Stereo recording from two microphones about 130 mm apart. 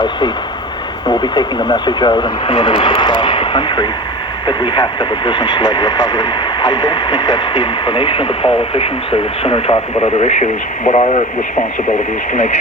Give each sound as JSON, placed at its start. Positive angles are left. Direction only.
{"t": 1.0, "sound": "speech", "side_deg": 35}